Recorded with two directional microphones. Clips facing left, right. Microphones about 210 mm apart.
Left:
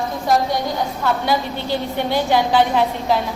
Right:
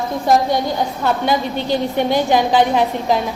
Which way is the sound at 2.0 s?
15° right (ahead or behind).